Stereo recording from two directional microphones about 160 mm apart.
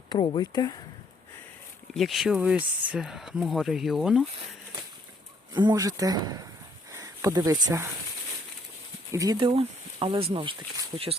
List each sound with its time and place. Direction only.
0.1 s speech: 30° left (ahead or behind)
1.9 s speech: centre (ahead or behind)
5.5 s speech: 25° right (ahead or behind)
9.1 s speech: 25° right (ahead or behind)
9.5 s speech: 35° right (ahead or behind)